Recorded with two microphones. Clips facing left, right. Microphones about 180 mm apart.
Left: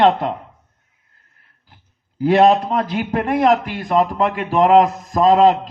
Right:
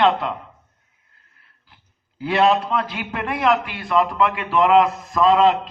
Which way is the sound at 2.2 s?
45° left (ahead or behind).